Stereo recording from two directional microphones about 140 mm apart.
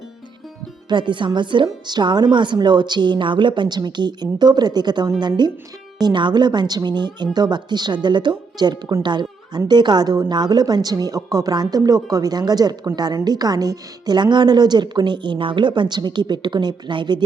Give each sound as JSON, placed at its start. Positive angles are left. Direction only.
{"t": 0.9, "sound": "a woman's voice", "side_deg": -35}